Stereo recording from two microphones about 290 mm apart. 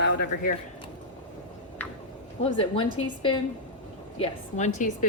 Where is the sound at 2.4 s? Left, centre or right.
Centre.